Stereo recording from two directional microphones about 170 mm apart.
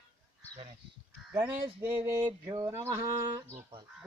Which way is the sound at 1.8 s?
15° right (ahead or behind).